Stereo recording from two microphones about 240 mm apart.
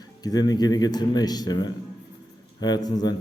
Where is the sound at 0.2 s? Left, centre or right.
Centre.